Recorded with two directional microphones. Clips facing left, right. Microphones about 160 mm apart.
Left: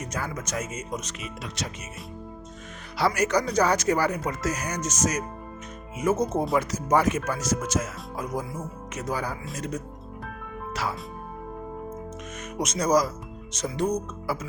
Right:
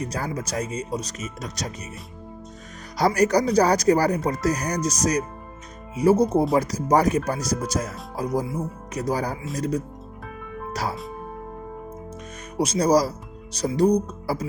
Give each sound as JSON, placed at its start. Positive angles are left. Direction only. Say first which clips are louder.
{"t": 0.0, "sound": "speech", "louder": "right 4 dB", "side_deg": -35}
{"t": 3.1, "sound": "speech", "louder": "right 6 dB", "side_deg": -35}
{"t": 10.7, "sound": "music", "louder": "right 2 dB", "side_deg": -40}
{"t": 12.5, "sound": "speech", "louder": "right 4 dB", "side_deg": -30}